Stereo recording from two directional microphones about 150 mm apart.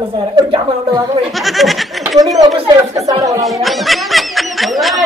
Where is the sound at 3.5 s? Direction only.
Centre (ahead or behind).